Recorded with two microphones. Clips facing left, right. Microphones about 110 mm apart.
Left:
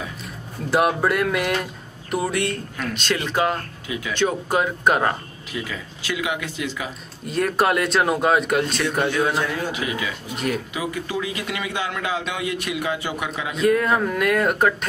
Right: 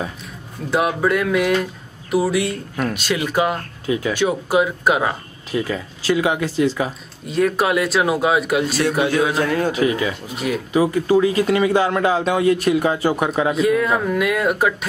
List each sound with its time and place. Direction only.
0.7 s speech: centre (ahead or behind)
3.8 s speech: 35° right (ahead or behind)
4.1 s speech: 10° right (ahead or behind)
5.5 s speech: 35° right (ahead or behind)
7.2 s speech: centre (ahead or behind)
9.4 s speech: 50° right (ahead or behind)
9.7 s speech: 35° right (ahead or behind)
10.3 s speech: centre (ahead or behind)
10.7 s speech: 35° right (ahead or behind)
13.6 s speech: centre (ahead or behind)